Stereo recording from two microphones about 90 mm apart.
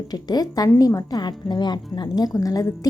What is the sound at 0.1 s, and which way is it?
A woman's voice, 45° left (ahead or behind).